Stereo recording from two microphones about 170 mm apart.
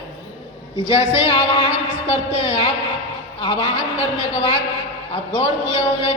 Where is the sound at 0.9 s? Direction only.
30° left (ahead or behind).